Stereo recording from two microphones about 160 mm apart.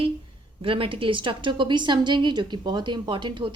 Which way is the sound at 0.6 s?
35° right (ahead or behind).